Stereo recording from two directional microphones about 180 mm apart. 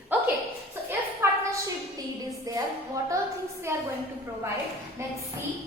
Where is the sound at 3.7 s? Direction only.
15° right (ahead or behind).